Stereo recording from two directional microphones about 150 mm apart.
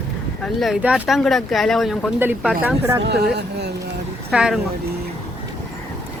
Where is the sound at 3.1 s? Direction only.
90° right.